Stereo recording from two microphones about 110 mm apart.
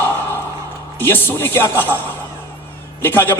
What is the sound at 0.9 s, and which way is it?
A man's voice, 20° left (ahead or behind).